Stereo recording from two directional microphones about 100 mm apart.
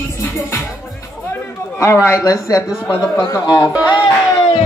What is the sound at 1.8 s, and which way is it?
Speech, 30° left (ahead or behind).